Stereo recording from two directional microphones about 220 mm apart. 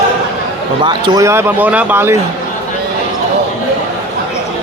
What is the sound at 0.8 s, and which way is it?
Speech, 20° right (ahead or behind).